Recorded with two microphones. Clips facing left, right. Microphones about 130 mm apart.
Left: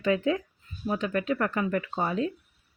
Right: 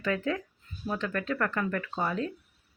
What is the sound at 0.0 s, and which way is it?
Speech, 20° left (ahead or behind).